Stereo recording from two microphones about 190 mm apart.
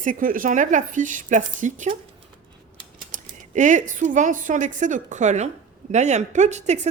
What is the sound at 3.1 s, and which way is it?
Speech, 40° right (ahead or behind).